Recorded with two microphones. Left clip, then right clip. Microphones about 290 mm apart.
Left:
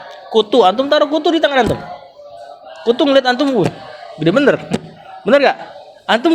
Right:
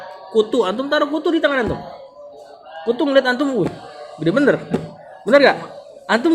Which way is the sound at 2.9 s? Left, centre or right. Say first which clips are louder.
Left 4 dB; centre.